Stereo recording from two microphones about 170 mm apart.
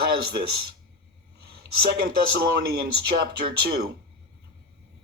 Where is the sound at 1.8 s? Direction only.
80° right.